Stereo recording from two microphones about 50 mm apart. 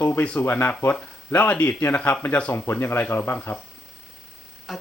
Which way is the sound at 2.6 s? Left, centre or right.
Left.